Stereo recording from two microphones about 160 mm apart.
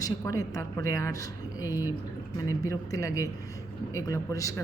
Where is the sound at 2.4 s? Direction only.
20° left (ahead or behind).